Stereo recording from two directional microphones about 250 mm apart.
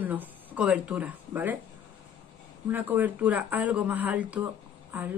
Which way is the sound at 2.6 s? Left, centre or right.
Centre.